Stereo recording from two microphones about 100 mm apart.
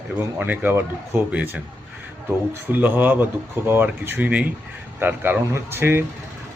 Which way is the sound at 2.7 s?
20° right (ahead or behind).